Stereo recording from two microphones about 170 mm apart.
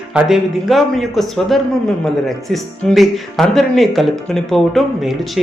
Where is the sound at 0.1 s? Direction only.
5° right (ahead or behind).